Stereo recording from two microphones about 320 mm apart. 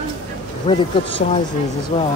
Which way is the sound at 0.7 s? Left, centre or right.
Centre.